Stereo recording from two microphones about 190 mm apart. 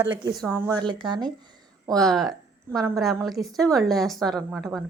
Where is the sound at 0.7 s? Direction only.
25° right (ahead or behind).